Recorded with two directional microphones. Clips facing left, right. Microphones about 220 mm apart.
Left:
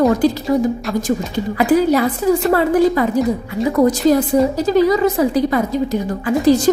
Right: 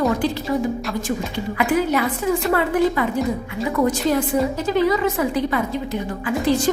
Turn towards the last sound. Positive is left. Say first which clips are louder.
# left 6 dB
turn(degrees=40)  # may be behind; listen again after turning